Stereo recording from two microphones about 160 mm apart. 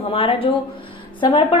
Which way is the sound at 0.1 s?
35° left (ahead or behind).